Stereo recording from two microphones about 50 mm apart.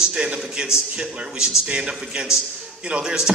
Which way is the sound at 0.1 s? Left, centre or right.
Centre.